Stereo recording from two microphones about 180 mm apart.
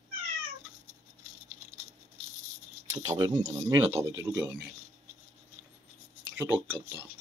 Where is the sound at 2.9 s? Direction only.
20° right (ahead or behind).